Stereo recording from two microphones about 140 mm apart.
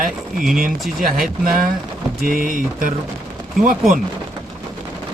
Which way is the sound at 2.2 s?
90° right.